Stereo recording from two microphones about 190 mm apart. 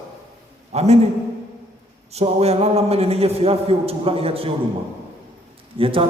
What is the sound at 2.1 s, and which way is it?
A man's voice, 35° right (ahead or behind).